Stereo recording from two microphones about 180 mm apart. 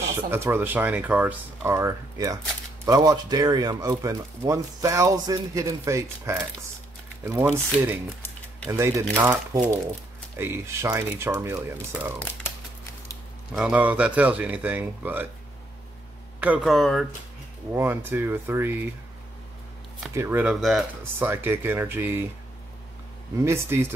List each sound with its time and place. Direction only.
0.1 s speech: 10° right (ahead or behind)
13.6 s speech: 10° right (ahead or behind)
16.3 s speech: 5° right (ahead or behind)
17.7 s speech: 10° right (ahead or behind)
20.2 s speech: 10° right (ahead or behind)
23.3 s speech: 15° right (ahead or behind)